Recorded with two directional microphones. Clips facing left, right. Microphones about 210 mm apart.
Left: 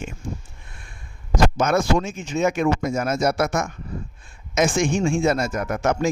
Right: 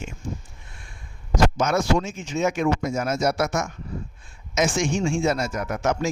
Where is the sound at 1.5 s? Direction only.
55° left (ahead or behind).